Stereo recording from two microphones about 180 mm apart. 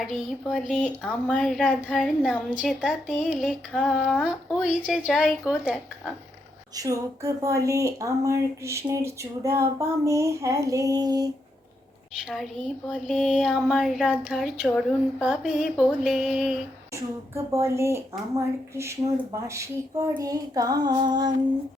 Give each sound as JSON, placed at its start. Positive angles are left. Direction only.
{"t": 0.0, "sound": "speech", "side_deg": 0}
{"t": 6.7, "sound": "speech", "side_deg": -20}
{"t": 12.1, "sound": "speech", "side_deg": 0}
{"t": 16.9, "sound": "speech", "side_deg": -15}